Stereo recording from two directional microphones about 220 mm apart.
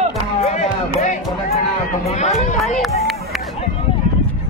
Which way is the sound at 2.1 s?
30° left (ahead or behind).